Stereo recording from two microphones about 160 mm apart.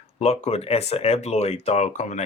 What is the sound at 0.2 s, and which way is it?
Speech, 40° left (ahead or behind).